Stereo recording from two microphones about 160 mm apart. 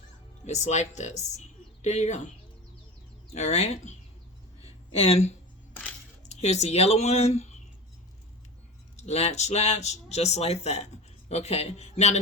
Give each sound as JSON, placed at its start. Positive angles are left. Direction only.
{"t": 0.4, "sound": "speech", "side_deg": 45}
{"t": 3.3, "sound": "speech", "side_deg": 45}
{"t": 4.6, "sound": "a sound", "side_deg": 40}
{"t": 6.2, "sound": "speech", "side_deg": 45}
{"t": 9.0, "sound": "speech", "side_deg": 45}